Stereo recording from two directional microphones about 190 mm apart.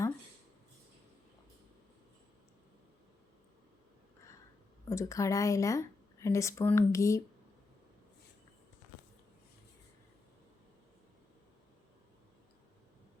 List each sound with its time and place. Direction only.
4.9 s speech: 15° left (ahead or behind)